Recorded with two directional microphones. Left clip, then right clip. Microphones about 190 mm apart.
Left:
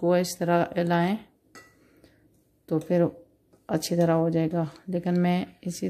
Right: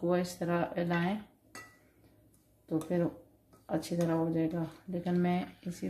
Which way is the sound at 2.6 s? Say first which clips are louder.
Left 8 dB; 60° left (ahead or behind).